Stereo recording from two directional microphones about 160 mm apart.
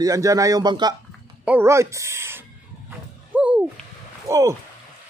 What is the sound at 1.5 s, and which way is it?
Speech, 15° right (ahead or behind).